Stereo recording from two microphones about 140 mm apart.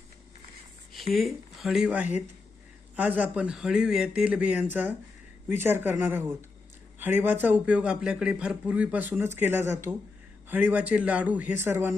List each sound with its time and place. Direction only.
0.9 s speech: centre (ahead or behind); by 11.9 s 15° right (ahead or behind)